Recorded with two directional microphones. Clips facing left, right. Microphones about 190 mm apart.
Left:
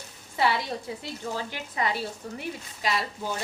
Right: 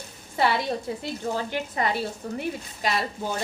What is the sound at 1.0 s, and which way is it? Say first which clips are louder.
Speech: right 4 dB; 55° right (ahead or behind).